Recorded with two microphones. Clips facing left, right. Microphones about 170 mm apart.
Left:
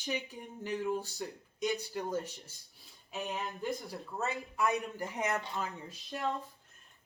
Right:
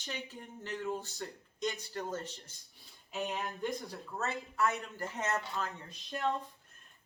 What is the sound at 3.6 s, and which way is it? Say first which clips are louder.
Speech: even; 10° left (ahead or behind).